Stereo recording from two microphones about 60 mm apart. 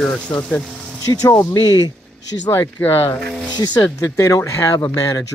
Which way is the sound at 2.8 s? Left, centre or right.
Left.